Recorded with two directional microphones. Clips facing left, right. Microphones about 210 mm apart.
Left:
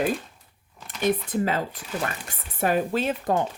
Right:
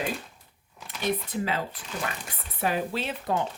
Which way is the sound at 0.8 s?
Centre (ahead or behind).